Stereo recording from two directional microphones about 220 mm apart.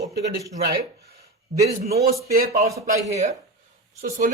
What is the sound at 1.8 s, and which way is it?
Speech, 45° right (ahead or behind).